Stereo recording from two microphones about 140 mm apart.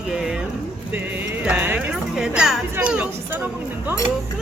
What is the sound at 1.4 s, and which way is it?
Speech, 10° right (ahead or behind).